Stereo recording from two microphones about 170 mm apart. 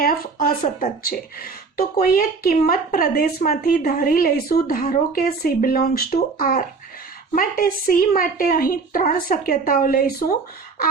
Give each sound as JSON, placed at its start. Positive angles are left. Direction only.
{"t": 0.0, "sound": "speech", "side_deg": 60}